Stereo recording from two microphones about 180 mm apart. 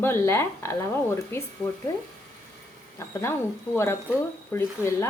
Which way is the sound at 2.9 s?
15° left (ahead or behind).